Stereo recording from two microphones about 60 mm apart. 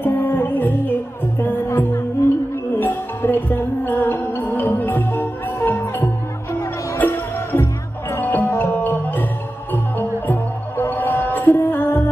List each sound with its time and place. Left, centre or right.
0.0 s music: left
1.7 s music: left
2.8 s music: left